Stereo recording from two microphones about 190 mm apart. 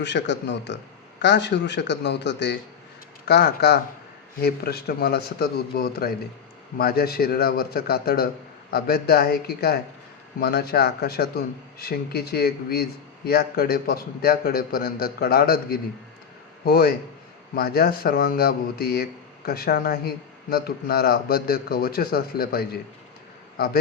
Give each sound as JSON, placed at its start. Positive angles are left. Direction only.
{"t": 0.0, "sound": "a man's voice", "side_deg": 65}